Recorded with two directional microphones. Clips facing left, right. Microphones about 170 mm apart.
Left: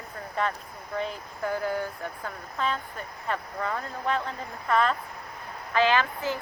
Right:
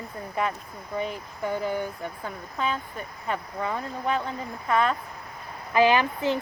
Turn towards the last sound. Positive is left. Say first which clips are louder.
# right 3 dB
turn(degrees=-20)  # may be behind; listen again after turning